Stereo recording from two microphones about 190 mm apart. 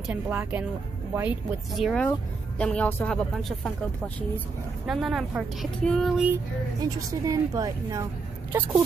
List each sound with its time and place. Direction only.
0.0 s a woman's voice: 5° right (ahead or behind)
4.8 s speech: 5° right (ahead or behind)
7.1 s a woman's voice: 20° right (ahead or behind)